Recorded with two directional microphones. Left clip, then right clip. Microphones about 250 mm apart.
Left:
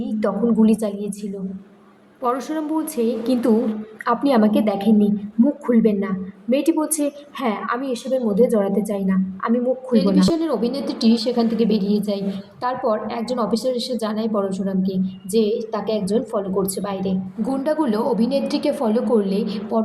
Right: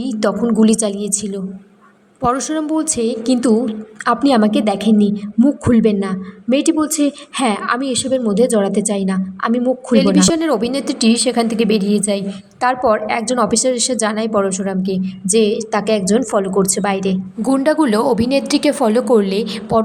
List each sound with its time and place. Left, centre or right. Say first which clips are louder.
0.0 s a woman's voice: right 4 dB; right
11.8 s a woman's voice: right 4 dB; right
12.6 s a woman's voice: right 7 dB; right